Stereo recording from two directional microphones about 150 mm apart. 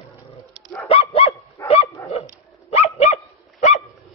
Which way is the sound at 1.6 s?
15° left (ahead or behind).